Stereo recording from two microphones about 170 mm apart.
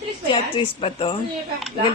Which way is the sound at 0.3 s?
30° left (ahead or behind).